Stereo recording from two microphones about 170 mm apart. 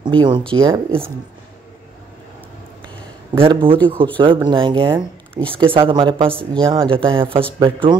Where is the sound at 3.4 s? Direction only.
30° right (ahead or behind).